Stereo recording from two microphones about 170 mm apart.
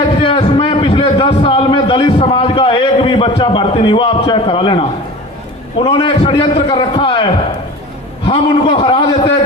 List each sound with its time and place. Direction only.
0.2 s a sound: 30° left (ahead or behind)
5.8 s a man's voice: 30° left (ahead or behind)
8.3 s a man's voice: 35° left (ahead or behind)